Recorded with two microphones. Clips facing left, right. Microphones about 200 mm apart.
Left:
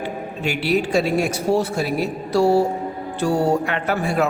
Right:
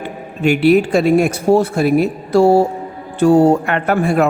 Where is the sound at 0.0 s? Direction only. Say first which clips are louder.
Right 7 dB; 55° right (ahead or behind).